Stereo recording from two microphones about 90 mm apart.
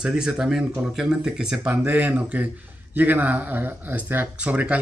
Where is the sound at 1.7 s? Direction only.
20° right (ahead or behind).